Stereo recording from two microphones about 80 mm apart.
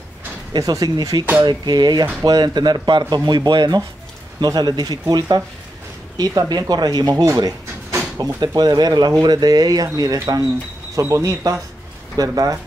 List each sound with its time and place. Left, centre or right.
0.5 s speech: right
8.4 s speech: right
11.0 s speech: right